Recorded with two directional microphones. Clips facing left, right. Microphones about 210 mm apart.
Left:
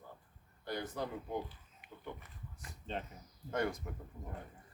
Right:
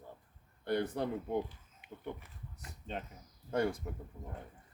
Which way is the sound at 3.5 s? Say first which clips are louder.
Right 3 dB; 30° right (ahead or behind).